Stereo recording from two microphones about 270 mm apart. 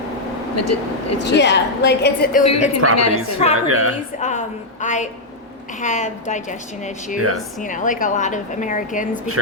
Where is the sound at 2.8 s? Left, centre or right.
Right.